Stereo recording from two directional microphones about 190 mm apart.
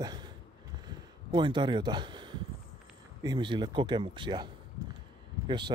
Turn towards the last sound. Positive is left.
turn(degrees=-25)  # may be behind; listen again after turning